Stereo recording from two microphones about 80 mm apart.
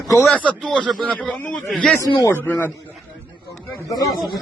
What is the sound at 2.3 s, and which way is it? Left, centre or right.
Speech, left.